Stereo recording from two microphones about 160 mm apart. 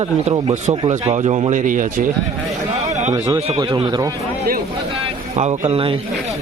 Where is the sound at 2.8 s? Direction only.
45° right (ahead or behind).